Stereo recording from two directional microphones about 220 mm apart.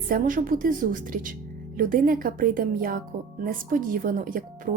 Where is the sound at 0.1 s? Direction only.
40° right (ahead or behind).